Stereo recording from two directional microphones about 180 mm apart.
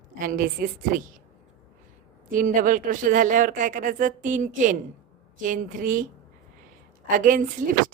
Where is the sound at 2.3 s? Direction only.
50° right (ahead or behind).